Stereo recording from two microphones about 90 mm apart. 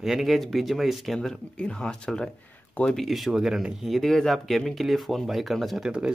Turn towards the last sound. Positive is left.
turn(degrees=0)  # may be behind; listen again after turning